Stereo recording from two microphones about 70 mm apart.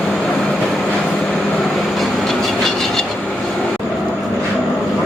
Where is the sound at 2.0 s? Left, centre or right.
Centre.